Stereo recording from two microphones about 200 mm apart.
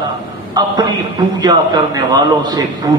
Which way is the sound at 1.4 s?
20° right (ahead or behind).